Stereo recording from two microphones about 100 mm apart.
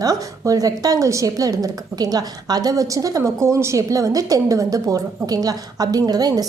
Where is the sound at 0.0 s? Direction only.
35° right (ahead or behind).